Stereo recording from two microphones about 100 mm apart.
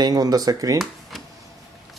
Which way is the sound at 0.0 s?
40° right (ahead or behind).